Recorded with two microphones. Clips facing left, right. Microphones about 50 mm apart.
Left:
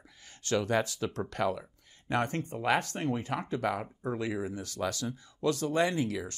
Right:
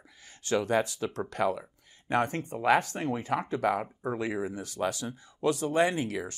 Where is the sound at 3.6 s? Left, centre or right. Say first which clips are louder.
Right 4 dB; right.